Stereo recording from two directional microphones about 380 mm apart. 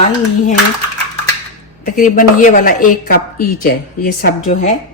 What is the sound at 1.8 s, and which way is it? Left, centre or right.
A woman's voice, left.